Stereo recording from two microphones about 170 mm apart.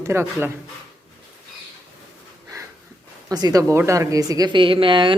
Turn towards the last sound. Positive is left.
turn(degrees=-30)  # may be behind; listen again after turning